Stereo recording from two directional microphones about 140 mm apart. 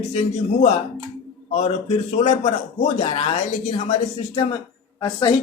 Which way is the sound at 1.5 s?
50° left (ahead or behind).